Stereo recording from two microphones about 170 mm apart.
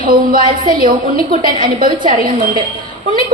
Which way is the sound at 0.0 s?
55° right (ahead or behind).